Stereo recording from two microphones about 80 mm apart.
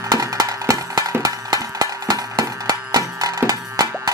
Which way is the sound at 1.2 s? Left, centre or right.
Right.